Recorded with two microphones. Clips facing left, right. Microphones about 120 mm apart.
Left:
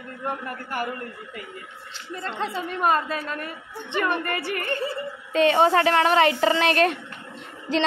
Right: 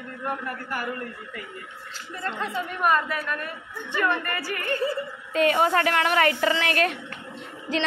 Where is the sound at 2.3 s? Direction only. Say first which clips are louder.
Left 2 dB; 30° left (ahead or behind).